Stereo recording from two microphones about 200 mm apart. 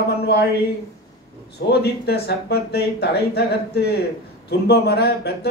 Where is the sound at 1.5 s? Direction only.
55° left (ahead or behind).